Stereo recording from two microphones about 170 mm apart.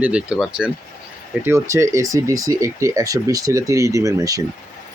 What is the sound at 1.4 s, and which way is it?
Speech, 15° right (ahead or behind).